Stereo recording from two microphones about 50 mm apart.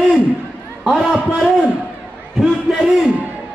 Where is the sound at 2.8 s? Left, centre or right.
Centre.